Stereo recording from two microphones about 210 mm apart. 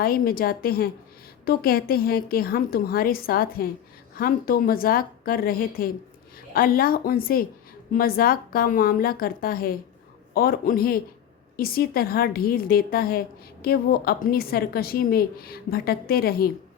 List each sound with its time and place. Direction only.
0.0 s a woman's voice: 45° left (ahead or behind)